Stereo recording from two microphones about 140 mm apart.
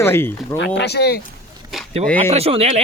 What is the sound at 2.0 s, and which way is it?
Speech, 45° right (ahead or behind).